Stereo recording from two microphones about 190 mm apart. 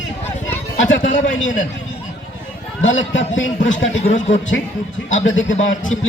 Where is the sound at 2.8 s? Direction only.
85° left.